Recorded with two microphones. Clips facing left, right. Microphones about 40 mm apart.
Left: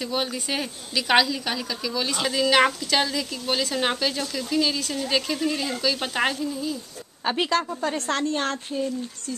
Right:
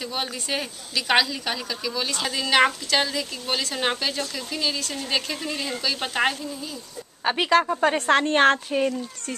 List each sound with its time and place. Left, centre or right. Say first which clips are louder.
0.0 s speech: left 3 dB; centre
7.2 s a woman's voice: right 3 dB; centre
7.6 s a woman's voice: right 6 dB; right
8.3 s speech: right 8 dB; right